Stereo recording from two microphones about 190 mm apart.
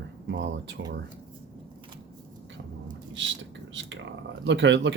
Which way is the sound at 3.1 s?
75° right (ahead or behind).